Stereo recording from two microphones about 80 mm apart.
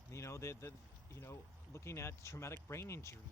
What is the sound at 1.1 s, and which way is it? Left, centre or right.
Speech, left.